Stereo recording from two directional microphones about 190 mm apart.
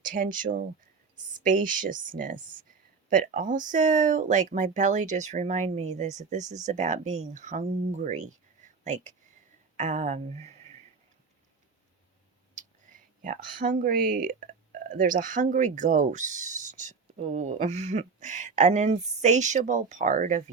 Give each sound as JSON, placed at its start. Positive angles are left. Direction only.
{"t": 0.0, "sound": "speech", "side_deg": -45}
{"t": 12.5, "sound": "speech", "side_deg": -45}